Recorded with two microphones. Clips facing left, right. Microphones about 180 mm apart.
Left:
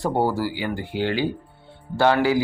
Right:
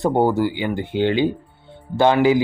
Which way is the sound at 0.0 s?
20° right (ahead or behind).